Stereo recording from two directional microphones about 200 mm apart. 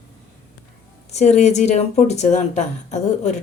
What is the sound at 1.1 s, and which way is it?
Speech, 35° left (ahead or behind).